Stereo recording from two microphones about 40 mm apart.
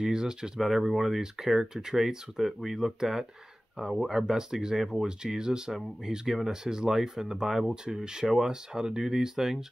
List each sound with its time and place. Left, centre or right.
0.0 s speech: centre
0.6 s speech: centre
7.7 s speech: centre